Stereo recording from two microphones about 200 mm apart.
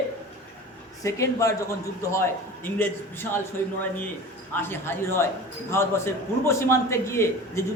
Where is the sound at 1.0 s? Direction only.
15° left (ahead or behind).